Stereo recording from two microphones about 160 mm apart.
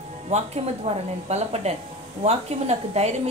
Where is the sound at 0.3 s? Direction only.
45° right (ahead or behind).